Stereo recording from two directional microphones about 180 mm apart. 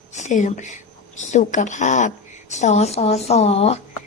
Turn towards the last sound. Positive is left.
turn(degrees=35)  # may be behind; listen again after turning